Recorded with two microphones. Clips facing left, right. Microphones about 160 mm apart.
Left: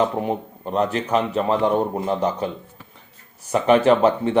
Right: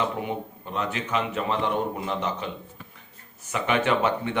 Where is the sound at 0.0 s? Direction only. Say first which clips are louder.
Left 6 dB; 40° left (ahead or behind).